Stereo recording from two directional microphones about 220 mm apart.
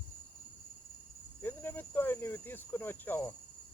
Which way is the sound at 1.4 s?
10° left (ahead or behind).